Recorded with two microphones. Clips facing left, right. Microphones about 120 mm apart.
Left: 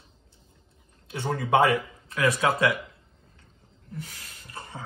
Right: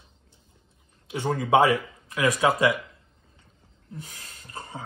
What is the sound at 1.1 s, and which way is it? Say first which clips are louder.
Speech: right 2 dB; 20° right (ahead or behind).